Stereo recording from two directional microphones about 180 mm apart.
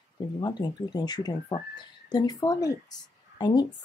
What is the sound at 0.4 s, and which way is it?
Speech, 20° left (ahead or behind).